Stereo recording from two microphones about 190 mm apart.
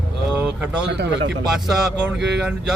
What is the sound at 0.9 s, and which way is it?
Speech, 60° right (ahead or behind).